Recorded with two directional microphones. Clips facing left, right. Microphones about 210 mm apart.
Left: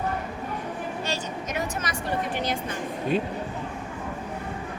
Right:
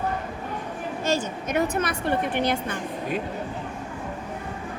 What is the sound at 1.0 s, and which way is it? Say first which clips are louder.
A woman's voice: right 5 dB; 50° right (ahead or behind).